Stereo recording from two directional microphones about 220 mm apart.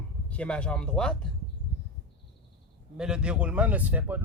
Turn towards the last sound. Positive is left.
turn(degrees=-5)  # may be behind; listen again after turning